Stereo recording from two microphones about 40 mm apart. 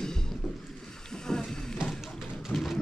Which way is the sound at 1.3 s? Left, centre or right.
Centre.